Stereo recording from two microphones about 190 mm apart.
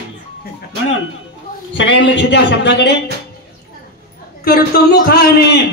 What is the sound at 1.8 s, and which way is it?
Music, 70° left (ahead or behind).